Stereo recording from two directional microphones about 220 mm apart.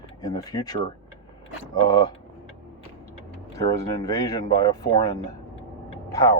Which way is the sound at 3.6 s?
15° left (ahead or behind).